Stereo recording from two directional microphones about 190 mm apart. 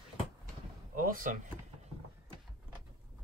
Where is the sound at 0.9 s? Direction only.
45° right (ahead or behind).